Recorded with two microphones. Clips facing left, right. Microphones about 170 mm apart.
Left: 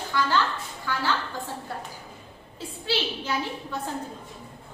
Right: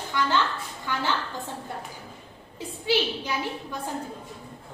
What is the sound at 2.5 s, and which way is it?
Speech, 15° right (ahead or behind).